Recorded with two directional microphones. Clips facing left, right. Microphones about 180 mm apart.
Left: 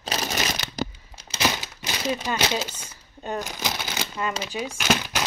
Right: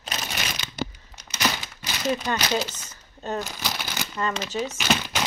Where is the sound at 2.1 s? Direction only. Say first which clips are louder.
Right 1 dB; 15° left (ahead or behind).